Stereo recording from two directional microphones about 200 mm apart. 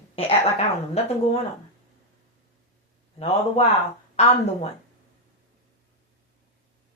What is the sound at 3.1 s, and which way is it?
A woman's voice, 30° left (ahead or behind).